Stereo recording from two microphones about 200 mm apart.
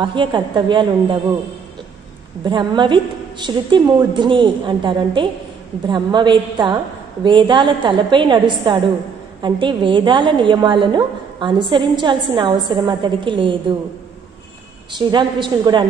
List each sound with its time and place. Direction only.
0.0 s a woman's voice: 25° right (ahead or behind)
2.4 s a woman's voice: 20° right (ahead or behind)
14.9 s a woman's voice: 20° right (ahead or behind)